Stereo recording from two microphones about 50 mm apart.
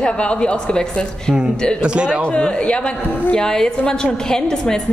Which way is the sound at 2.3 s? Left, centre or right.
Left.